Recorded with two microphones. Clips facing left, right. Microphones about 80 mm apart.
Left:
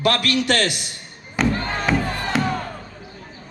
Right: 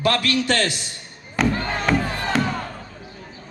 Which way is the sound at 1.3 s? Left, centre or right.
Centre.